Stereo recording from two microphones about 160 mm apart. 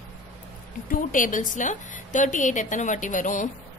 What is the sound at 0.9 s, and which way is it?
A woman's voice, 55° left (ahead or behind).